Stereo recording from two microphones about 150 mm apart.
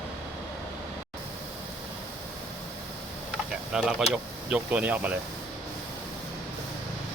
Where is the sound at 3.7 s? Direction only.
5° right (ahead or behind).